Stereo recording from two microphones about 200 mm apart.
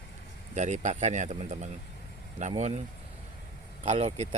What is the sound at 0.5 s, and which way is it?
A man's voice, 35° right (ahead or behind).